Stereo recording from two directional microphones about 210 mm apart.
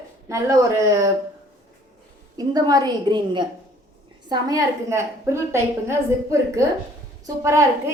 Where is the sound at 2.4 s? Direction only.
20° right (ahead or behind).